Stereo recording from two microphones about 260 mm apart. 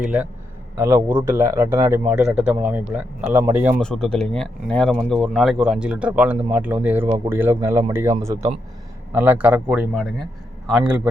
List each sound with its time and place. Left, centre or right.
0.0 s speech: centre